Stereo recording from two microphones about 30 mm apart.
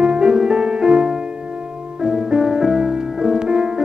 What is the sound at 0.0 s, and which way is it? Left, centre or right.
Music, right.